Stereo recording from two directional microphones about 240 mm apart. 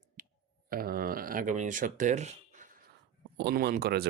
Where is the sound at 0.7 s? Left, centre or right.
Right.